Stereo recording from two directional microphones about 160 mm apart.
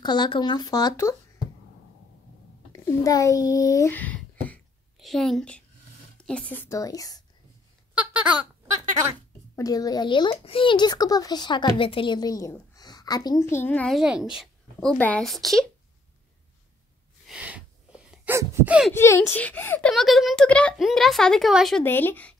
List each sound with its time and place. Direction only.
0.0 s a child's voice: 25° left (ahead or behind)
2.7 s a child's voice: 20° left (ahead or behind)
3.9 s a sound: 10° left (ahead or behind)
4.9 s a woman's voice: centre (ahead or behind); by 7.2 s 20° left (ahead or behind)
7.9 s a sound: 10° right (ahead or behind)
9.6 s a child's voice: 20° left (ahead or behind)
13.9 s speech: 5° right (ahead or behind)
17.3 s a sound: 5° right (ahead or behind)
18.3 s a sound: 15° right (ahead or behind)
18.9 s a woman's voice: 15° left (ahead or behind)
19.9 s speech: centre (ahead or behind)
21.8 s a woman's voice: 10° left (ahead or behind)